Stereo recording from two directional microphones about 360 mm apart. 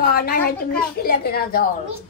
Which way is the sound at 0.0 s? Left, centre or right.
Left.